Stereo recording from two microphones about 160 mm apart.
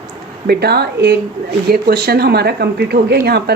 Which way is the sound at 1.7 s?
70° right (ahead or behind).